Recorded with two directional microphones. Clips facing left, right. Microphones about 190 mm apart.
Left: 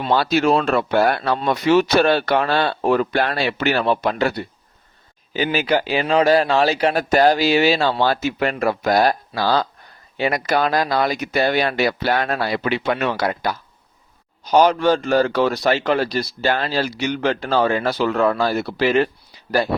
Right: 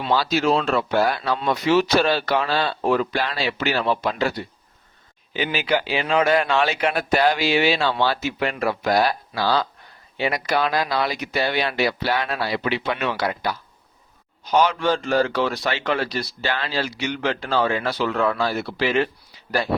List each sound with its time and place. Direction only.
0.0 s speech: 60° left (ahead or behind)
5.3 s a man's voice: 40° left (ahead or behind)